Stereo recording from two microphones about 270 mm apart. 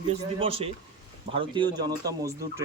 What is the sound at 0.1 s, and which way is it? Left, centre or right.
A man's voice, right.